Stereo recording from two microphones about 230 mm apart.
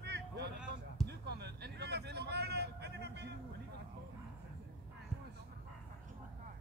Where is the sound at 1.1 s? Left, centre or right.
Right.